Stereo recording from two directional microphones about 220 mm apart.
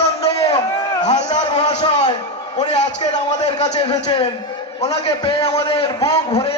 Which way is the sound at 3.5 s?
20° left (ahead or behind).